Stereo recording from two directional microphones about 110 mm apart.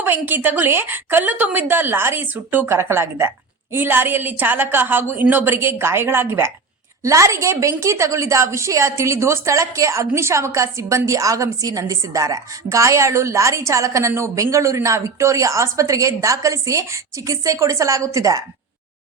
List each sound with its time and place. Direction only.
0.0 s a woman's voice: 20° right (ahead or behind)